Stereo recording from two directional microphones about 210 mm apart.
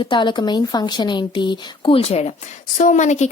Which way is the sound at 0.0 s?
20° left (ahead or behind).